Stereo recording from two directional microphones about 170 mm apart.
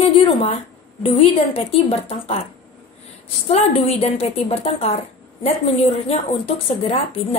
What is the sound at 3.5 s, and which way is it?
A woman's voice, 35° left (ahead or behind).